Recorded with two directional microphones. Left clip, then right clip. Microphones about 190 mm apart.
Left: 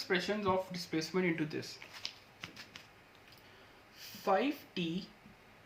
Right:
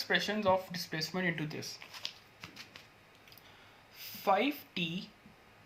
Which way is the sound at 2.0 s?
25° right (ahead or behind).